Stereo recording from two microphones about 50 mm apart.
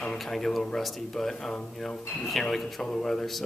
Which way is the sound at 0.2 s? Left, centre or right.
Centre.